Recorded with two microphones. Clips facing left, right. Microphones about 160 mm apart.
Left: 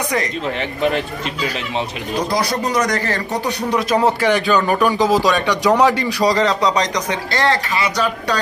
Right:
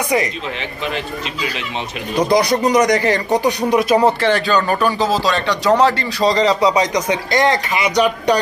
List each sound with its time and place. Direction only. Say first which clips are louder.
2.3 s a man's voice: right 6 dB; 15° right (ahead or behind)
4.0 s speech: right 1 dB; 10° left (ahead or behind)
6.3 s a man's voice: right 2 dB; 5° right (ahead or behind)